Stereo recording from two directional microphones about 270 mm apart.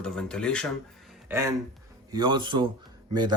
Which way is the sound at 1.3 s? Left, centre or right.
Centre.